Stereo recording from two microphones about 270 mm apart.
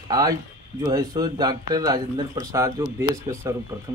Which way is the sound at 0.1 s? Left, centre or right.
Centre.